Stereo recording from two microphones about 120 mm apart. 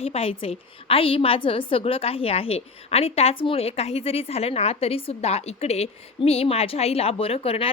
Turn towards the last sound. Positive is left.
turn(degrees=55)  # may be behind; listen again after turning